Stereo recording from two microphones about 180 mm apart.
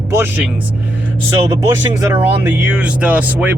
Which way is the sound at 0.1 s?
10° right (ahead or behind).